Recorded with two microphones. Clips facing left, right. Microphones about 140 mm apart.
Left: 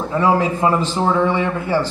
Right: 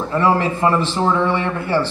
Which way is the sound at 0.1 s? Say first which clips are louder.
Even; 15° left (ahead or behind).